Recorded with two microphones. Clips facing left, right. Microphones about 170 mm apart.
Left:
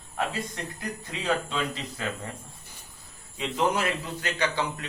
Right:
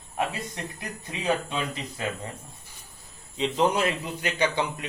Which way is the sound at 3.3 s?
25° right (ahead or behind).